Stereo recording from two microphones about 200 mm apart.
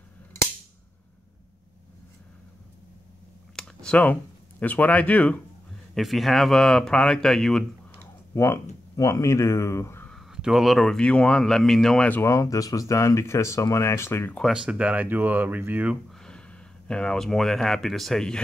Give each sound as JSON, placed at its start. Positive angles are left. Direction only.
{"t": 3.5, "sound": "speech", "side_deg": 5}
{"t": 8.4, "sound": "speech", "side_deg": 15}